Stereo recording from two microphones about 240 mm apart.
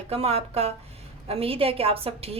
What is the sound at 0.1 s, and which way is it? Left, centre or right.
A woman's voice, right.